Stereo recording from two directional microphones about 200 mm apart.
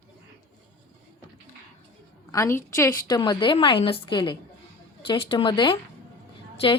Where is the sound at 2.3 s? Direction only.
15° left (ahead or behind).